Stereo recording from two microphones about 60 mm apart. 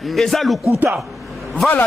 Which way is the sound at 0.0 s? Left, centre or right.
Centre.